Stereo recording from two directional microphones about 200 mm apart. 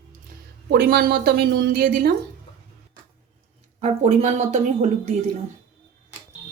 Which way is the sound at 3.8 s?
35° right (ahead or behind).